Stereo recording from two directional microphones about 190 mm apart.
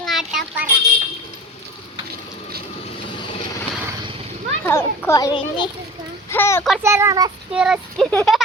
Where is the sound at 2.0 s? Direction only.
55° right (ahead or behind).